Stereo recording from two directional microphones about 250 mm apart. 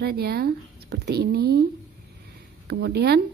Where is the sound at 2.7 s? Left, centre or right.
Right.